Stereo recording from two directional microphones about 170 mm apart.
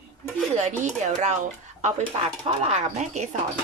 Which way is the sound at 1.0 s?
45° right (ahead or behind).